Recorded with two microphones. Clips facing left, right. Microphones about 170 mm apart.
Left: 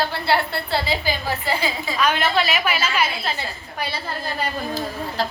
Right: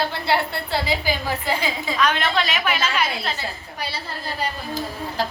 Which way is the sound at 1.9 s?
5° left (ahead or behind).